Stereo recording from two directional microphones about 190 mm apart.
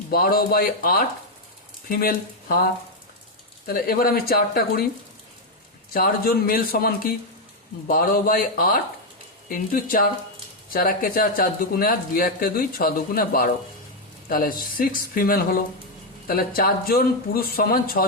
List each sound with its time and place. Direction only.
0.1 s speech: 50° left (ahead or behind)
3.7 s speech: 50° left (ahead or behind)
5.9 s speech: 50° left (ahead or behind)